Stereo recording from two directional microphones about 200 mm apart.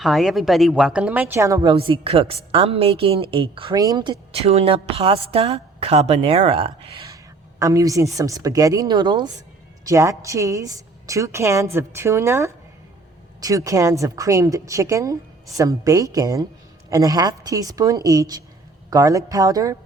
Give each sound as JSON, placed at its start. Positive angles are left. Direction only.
{"t": 0.0, "sound": "speech", "side_deg": 0}
{"t": 1.7, "sound": "a woman's voice", "side_deg": -25}
{"t": 7.6, "sound": "a woman's voice", "side_deg": -15}